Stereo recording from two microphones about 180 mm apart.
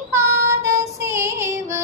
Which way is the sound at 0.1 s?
15° right (ahead or behind).